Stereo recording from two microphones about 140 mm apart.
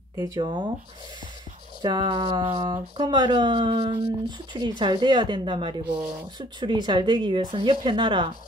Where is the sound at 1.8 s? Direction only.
30° right (ahead or behind).